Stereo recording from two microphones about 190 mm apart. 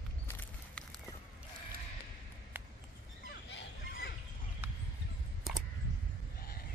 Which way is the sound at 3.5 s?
55° left (ahead or behind).